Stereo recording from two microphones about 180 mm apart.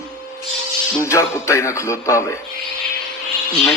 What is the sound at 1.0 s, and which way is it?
A man's voice, 15° left (ahead or behind).